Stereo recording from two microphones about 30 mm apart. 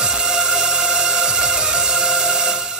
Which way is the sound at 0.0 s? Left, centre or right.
Right.